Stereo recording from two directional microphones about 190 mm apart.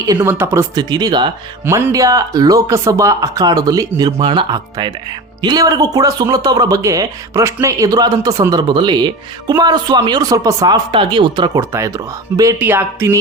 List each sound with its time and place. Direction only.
0.1 s speech: 10° right (ahead or behind)